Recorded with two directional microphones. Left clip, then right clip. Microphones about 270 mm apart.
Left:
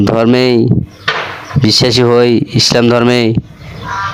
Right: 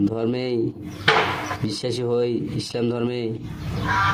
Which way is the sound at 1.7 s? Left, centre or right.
Left.